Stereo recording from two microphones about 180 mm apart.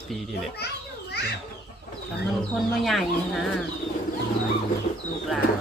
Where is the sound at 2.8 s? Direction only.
Centre (ahead or behind).